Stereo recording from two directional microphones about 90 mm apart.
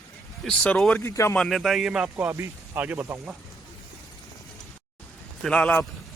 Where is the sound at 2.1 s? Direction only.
25° right (ahead or behind).